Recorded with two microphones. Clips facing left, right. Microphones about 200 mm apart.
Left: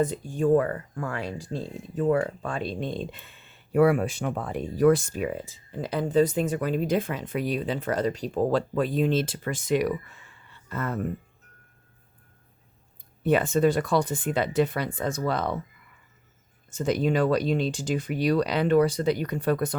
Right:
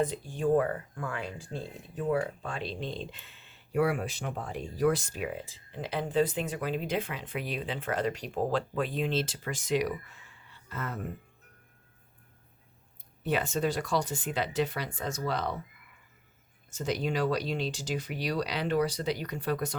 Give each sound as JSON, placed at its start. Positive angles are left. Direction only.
{"t": 0.0, "sound": "speech", "side_deg": 45}
{"t": 2.0, "sound": "speech", "side_deg": 50}
{"t": 13.2, "sound": "speech", "side_deg": 55}
{"t": 16.7, "sound": "speech", "side_deg": 50}